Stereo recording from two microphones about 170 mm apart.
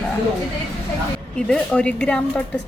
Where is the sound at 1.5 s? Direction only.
5° left (ahead or behind).